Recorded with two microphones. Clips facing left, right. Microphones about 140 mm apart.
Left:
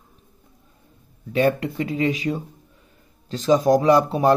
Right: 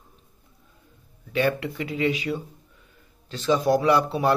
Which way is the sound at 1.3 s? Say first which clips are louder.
Left 4 dB; 40° left (ahead or behind).